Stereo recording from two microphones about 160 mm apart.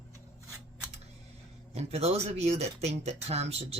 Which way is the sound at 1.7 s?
40° right (ahead or behind).